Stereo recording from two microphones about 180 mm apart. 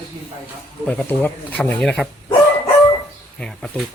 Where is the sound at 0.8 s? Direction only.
10° left (ahead or behind).